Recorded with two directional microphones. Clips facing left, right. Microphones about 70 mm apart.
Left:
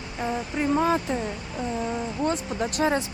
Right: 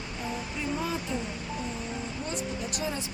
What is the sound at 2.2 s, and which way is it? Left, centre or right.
Speech, left.